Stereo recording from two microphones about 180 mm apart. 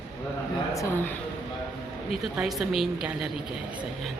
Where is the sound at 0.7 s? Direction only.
15° left (ahead or behind).